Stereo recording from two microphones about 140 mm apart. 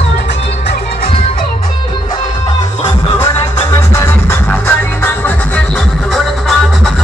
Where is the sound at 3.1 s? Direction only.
20° left (ahead or behind).